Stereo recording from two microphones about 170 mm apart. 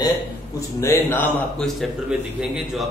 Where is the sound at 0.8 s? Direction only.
15° left (ahead or behind).